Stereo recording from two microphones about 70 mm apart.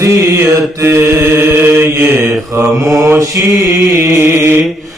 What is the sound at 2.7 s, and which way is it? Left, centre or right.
Mantra, right.